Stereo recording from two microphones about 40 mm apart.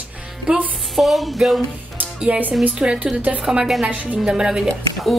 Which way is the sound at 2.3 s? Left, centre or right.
Right.